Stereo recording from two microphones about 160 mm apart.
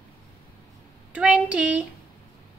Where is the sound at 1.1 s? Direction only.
5° right (ahead or behind).